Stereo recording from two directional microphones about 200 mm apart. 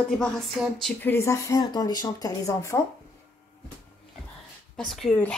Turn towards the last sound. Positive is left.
turn(degrees=5)  # may be behind; listen again after turning